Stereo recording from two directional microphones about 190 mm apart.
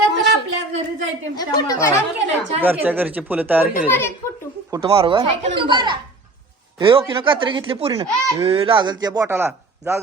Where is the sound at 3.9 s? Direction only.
10° left (ahead or behind).